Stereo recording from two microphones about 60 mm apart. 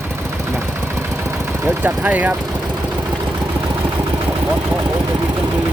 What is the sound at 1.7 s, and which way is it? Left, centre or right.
Speech, right.